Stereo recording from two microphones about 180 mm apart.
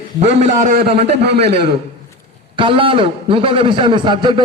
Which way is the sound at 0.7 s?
65° right (ahead or behind).